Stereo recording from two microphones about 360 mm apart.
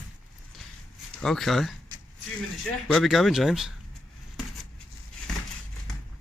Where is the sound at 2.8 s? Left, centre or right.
Centre.